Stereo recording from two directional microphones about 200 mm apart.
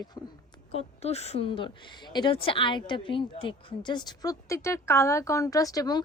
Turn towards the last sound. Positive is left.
turn(degrees=20)  # may be behind; listen again after turning